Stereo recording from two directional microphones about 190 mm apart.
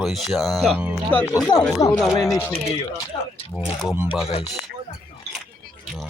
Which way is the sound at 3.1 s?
20° left (ahead or behind).